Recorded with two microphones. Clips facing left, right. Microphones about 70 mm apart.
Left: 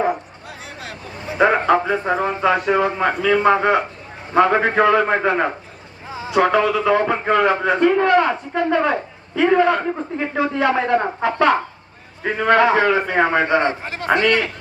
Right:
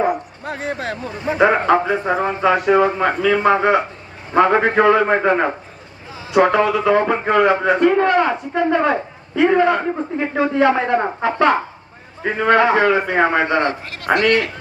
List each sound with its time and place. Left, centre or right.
0.4 s speech: right
1.4 s a man's voice: centre
13.5 s a man's voice: left